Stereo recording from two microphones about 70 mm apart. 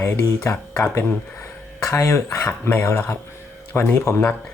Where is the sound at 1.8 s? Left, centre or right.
Left.